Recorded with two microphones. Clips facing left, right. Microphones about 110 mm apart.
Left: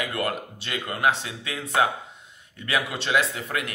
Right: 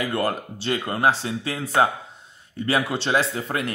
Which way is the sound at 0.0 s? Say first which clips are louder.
Right 4 dB; 30° right (ahead or behind).